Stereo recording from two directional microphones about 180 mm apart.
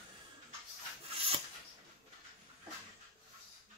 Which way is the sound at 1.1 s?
30° right (ahead or behind).